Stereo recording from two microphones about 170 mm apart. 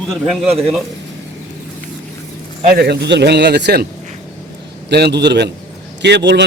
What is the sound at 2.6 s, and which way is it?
A man's voice, 70° right (ahead or behind).